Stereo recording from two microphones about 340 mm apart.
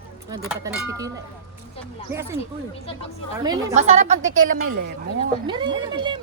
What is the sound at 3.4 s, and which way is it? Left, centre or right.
A woman's voice, centre.